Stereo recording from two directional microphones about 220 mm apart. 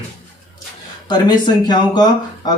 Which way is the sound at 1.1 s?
20° left (ahead or behind).